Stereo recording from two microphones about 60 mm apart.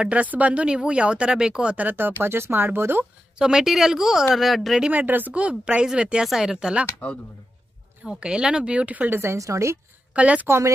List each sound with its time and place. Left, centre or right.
0.0 s speech: right
1.9 s speech: right
3.3 s a woman's voice: centre
4.9 s a woman's voice: right; by 6.8 s centre
7.0 s a man's voice: left
8.0 s a woman's voice: centre
9.2 s a woman's voice: right
10.1 s speech: right